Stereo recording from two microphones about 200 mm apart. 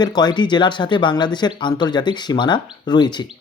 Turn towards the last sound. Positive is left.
turn(degrees=20)  # may be behind; listen again after turning